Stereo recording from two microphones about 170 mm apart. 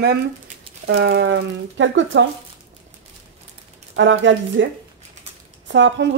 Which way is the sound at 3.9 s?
90° right.